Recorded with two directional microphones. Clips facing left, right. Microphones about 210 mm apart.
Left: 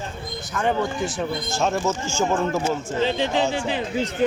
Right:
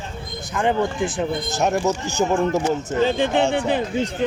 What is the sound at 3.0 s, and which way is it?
Speech, 50° right (ahead or behind).